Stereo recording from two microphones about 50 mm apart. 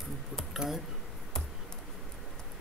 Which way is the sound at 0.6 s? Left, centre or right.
Centre.